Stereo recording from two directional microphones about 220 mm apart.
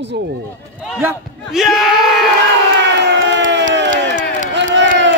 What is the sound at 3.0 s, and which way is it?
Crowd, 55° right (ahead or behind).